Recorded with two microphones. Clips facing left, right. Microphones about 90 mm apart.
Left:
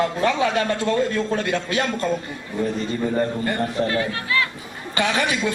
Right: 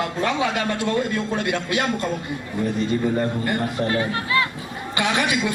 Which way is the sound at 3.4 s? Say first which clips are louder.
Left 1 dB; 20° right (ahead or behind).